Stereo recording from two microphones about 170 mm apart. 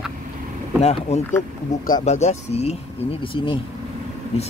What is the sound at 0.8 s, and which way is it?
Speech, 40° left (ahead or behind).